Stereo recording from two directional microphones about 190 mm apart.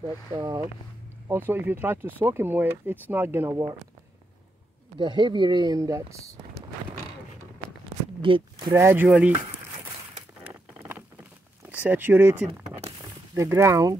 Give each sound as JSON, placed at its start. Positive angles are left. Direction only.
{"t": 0.3, "sound": "speech", "side_deg": -20}
{"t": 4.9, "sound": "speech", "side_deg": -25}
{"t": 8.2, "sound": "speech", "side_deg": -25}
{"t": 8.7, "sound": "speech", "side_deg": -10}
{"t": 11.8, "sound": "speech", "side_deg": -10}
{"t": 12.5, "sound": "a sound", "side_deg": -10}
{"t": 13.4, "sound": "speech", "side_deg": -15}